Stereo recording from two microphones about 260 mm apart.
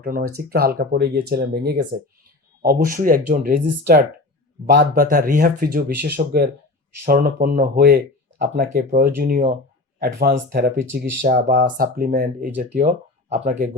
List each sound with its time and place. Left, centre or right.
0.0 s speech: right